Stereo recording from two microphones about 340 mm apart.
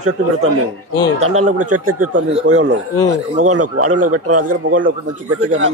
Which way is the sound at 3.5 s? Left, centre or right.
Right.